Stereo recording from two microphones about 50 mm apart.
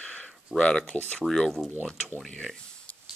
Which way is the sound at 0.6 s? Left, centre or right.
Centre.